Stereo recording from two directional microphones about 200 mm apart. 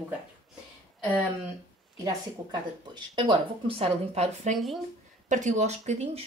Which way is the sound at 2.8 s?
20° right (ahead or behind).